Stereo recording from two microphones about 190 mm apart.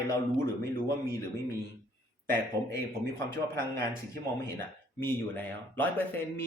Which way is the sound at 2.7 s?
15° left (ahead or behind).